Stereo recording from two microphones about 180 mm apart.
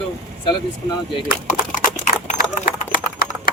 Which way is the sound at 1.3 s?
50° left (ahead or behind).